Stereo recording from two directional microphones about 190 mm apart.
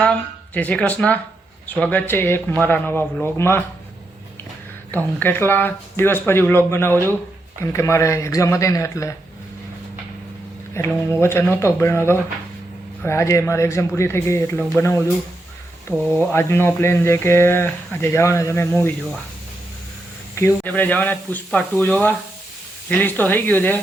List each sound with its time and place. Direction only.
0.0 s speech: 5° left (ahead or behind)
4.9 s speech: 10° left (ahead or behind)
10.8 s speech: 15° left (ahead or behind)
16.1 s speech: 10° left (ahead or behind)
20.3 s speech: 10° left (ahead or behind)